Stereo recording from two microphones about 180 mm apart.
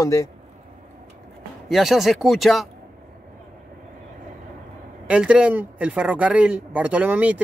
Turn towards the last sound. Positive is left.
turn(degrees=-10)  # may be behind; listen again after turning